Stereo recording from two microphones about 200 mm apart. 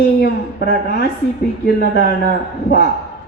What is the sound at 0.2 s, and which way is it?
A woman's voice, 55° left (ahead or behind).